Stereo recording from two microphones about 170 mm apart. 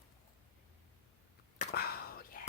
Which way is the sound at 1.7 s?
65° left (ahead or behind).